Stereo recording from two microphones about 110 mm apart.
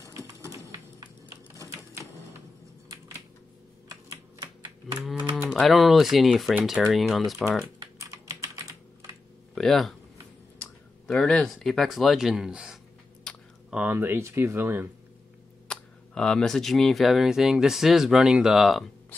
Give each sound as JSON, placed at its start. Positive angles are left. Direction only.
{"t": 0.0, "sound": "typing", "side_deg": -25}
{"t": 5.5, "sound": "speech", "side_deg": 0}
{"t": 8.0, "sound": "typing", "side_deg": -30}
{"t": 9.6, "sound": "speech", "side_deg": 5}
{"t": 11.1, "sound": "speech", "side_deg": 10}
{"t": 13.3, "sound": "a sound", "side_deg": 10}
{"t": 13.7, "sound": "speech", "side_deg": -15}
{"t": 15.7, "sound": "speech", "side_deg": 5}